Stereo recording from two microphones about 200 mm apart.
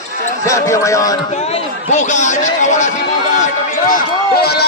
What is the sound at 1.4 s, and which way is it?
A man's voice, 30° left (ahead or behind).